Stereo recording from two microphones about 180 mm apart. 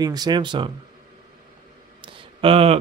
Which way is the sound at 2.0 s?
30° right (ahead or behind).